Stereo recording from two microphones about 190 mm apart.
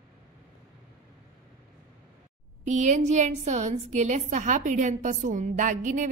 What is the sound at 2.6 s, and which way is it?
A woman's voice, 40° right (ahead or behind).